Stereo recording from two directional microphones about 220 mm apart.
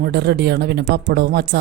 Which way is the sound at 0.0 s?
50° right (ahead or behind).